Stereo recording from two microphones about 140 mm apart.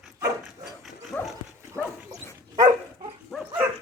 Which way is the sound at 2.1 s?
25° right (ahead or behind).